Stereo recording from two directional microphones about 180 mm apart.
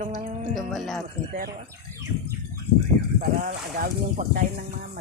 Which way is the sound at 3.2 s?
50° right (ahead or behind).